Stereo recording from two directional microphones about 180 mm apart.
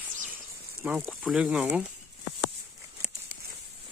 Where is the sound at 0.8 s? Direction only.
10° right (ahead or behind).